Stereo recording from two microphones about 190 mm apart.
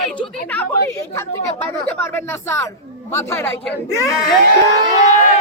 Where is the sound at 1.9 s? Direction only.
10° left (ahead or behind).